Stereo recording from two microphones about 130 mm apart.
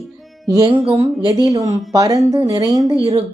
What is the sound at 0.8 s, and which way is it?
Speech, 50° right (ahead or behind).